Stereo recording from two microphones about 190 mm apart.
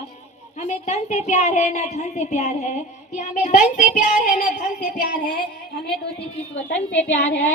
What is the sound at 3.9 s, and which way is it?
Child singing, 40° left (ahead or behind).